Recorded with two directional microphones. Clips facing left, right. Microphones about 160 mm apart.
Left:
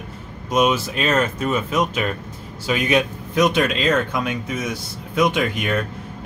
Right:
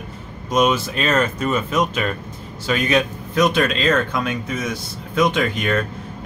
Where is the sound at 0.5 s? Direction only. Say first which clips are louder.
Right 1 dB; 5° left (ahead or behind).